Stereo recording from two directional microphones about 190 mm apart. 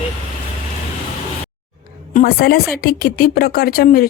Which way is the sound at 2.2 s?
55° left (ahead or behind).